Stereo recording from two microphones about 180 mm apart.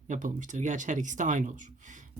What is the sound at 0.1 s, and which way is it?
Speech, 45° right (ahead or behind).